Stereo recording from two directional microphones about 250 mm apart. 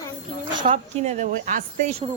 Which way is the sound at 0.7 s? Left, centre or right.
Right.